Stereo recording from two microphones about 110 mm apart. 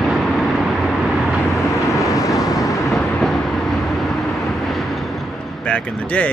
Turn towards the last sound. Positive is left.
turn(degrees=10)  # may be behind; listen again after turning